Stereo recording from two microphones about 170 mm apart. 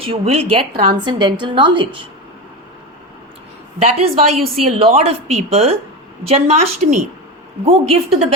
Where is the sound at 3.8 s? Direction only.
35° right (ahead or behind).